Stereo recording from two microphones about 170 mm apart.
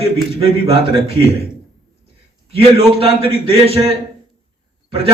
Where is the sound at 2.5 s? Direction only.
35° right (ahead or behind).